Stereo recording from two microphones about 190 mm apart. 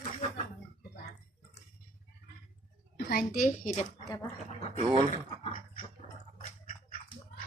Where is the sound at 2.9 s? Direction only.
60° left (ahead or behind).